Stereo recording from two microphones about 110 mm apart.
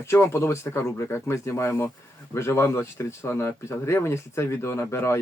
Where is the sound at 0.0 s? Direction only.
25° left (ahead or behind).